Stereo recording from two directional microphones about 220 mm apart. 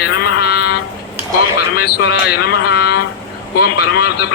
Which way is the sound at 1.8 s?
45° left (ahead or behind).